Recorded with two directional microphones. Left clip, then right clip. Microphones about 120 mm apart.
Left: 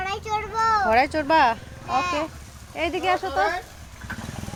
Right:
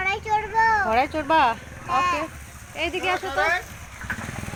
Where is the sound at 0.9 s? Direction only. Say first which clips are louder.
Left 2 dB; 50° left (ahead or behind).